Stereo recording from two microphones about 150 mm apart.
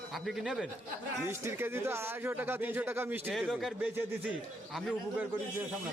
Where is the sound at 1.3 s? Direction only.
15° right (ahead or behind).